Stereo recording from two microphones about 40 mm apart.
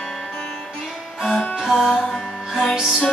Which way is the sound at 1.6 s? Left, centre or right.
Centre.